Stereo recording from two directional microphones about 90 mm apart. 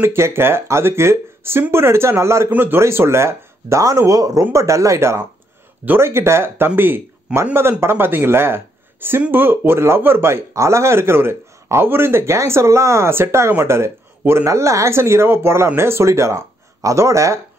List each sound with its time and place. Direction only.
0.0 s speech: 30° right (ahead or behind)
7.3 s a man's voice: 10° right (ahead or behind)
7.8 s speech: 25° right (ahead or behind)